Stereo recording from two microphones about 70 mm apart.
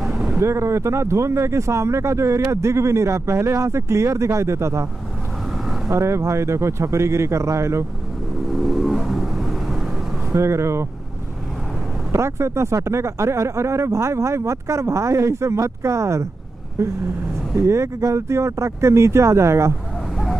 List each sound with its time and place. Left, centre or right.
0.4 s speech: right
5.9 s speech: right
8.5 s vehicle: centre
10.3 s speech: right
12.1 s speech: right
17.6 s speech: right